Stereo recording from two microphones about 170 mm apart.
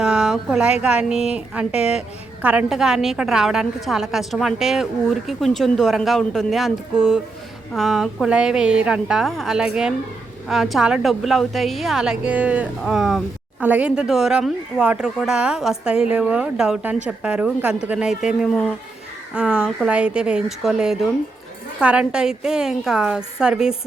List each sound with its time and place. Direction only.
0.0 s a woman's voice: 5° right (ahead or behind)